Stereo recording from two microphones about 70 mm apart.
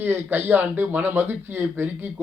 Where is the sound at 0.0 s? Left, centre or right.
Right.